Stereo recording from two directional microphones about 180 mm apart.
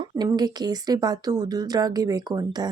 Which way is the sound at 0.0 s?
20° right (ahead or behind).